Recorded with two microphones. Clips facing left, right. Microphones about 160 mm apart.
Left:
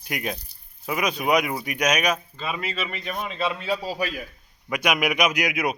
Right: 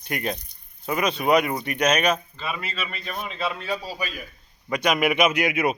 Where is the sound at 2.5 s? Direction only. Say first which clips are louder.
Left 2 dB; 15° left (ahead or behind).